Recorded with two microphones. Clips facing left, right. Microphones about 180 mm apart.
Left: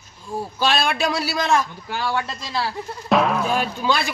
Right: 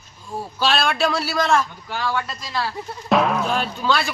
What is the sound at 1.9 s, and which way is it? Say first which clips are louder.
Speech: even; 25° left (ahead or behind).